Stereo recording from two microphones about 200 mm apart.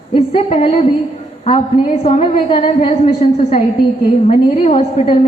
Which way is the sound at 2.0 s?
30° left (ahead or behind).